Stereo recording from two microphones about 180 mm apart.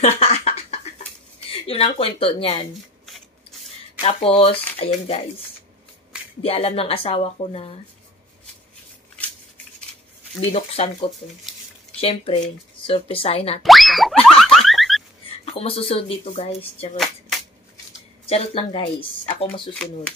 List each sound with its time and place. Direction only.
0.0 s a sound: 35° left (ahead or behind)
1.5 s speech: 30° left (ahead or behind)
4.0 s speech: 35° left (ahead or behind)
6.4 s speech: 30° left (ahead or behind)
10.5 s speech: 35° left (ahead or behind)
13.6 s speech: centre (ahead or behind)
14.2 s a sound: centre (ahead or behind)
15.4 s speech: 30° left (ahead or behind)
16.9 s a sound: centre (ahead or behind)
18.2 s speech: 30° left (ahead or behind)
19.7 s speech: 5° left (ahead or behind)